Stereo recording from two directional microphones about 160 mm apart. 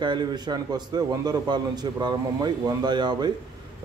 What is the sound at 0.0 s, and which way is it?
A man's voice, 30° right (ahead or behind).